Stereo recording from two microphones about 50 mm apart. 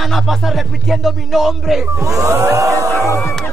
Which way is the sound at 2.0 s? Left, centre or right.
Right.